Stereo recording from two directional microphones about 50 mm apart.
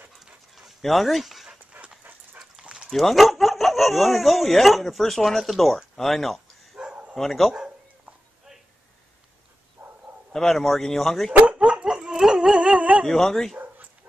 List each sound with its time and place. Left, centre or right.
0.1 s dog: centre
1.7 s dog: right
2.6 s dog: centre
2.9 s speech: centre
6.8 s bow-wow: right
7.2 s speech: centre
7.5 s a sound: centre
9.8 s bow-wow: right
10.3 s speech: centre
11.4 s dog: right
13.0 s speech: centre